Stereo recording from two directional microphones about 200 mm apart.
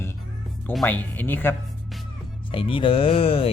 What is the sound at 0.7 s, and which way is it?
Speech, 5° left (ahead or behind).